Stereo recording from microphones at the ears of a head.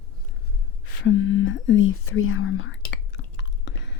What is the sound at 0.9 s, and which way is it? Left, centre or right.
Whispering, left.